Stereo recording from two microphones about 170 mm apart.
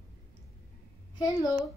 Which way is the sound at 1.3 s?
20° left (ahead or behind).